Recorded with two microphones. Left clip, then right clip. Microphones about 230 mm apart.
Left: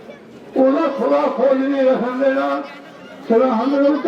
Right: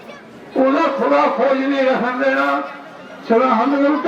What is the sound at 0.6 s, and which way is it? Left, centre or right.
A man's voice, right.